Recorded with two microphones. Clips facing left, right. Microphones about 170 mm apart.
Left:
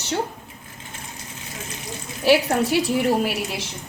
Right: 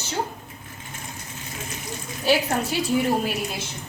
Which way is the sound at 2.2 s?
70° left (ahead or behind).